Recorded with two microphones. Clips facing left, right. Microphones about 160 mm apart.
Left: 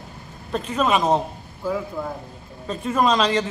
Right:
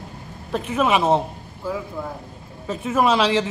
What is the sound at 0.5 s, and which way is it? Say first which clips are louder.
Speech: right 1 dB; 10° right (ahead or behind).